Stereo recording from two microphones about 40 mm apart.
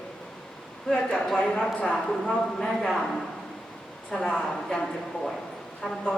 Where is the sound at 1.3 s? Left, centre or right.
Centre.